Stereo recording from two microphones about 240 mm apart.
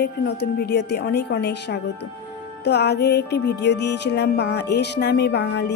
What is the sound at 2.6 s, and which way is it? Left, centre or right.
Music, left.